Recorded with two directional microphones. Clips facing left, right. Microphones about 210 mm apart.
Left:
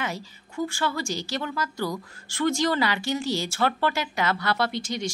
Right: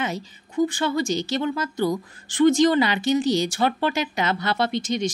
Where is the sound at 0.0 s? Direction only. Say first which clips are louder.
Right 4 dB; 20° right (ahead or behind).